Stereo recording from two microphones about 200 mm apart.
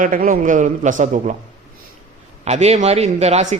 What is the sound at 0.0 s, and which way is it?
A man's voice, 45° right (ahead or behind).